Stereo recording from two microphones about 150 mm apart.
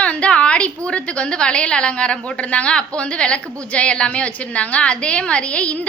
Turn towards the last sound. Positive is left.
turn(degrees=10)  # may be behind; listen again after turning